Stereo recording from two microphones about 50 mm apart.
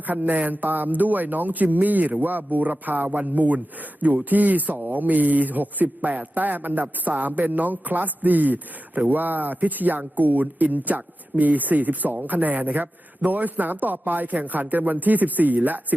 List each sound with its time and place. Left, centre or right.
0.0 s speech: right